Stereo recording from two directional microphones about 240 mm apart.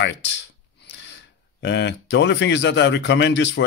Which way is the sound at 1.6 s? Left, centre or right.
Left.